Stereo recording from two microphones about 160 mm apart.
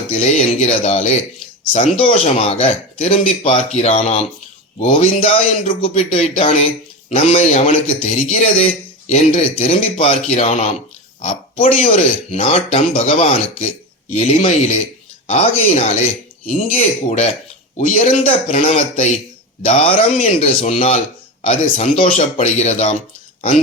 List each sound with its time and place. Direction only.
0.1 s speech: 45° left (ahead or behind)
11.2 s a sound: 45° left (ahead or behind)
11.9 s speech: 40° left (ahead or behind)
15.3 s speech: 45° left (ahead or behind)
17.7 s speech: 55° left (ahead or behind)
18.2 s speech: 35° left (ahead or behind)